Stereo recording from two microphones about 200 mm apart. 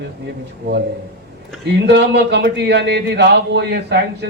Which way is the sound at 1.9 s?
60° right (ahead or behind).